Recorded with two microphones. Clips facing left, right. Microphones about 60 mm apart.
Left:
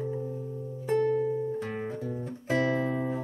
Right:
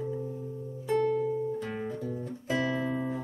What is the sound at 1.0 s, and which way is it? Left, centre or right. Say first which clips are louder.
Music: left 1 dB; left.